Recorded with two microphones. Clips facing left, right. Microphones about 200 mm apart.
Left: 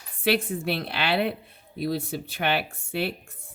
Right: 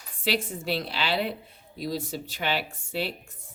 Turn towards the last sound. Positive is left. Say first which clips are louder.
# left 2 dB
turn(degrees=55)  # may be behind; listen again after turning